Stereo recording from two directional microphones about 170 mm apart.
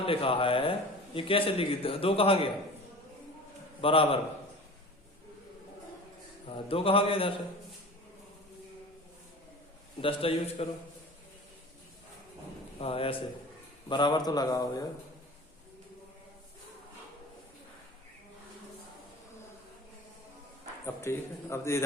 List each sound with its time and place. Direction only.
0.0 s a man's voice: 35° left (ahead or behind)
3.8 s a man's voice: 30° left (ahead or behind)
6.5 s a man's voice: 35° left (ahead or behind)
10.0 s a man's voice: 35° left (ahead or behind)
12.8 s a man's voice: 35° left (ahead or behind)
20.8 s a man's voice: 15° left (ahead or behind)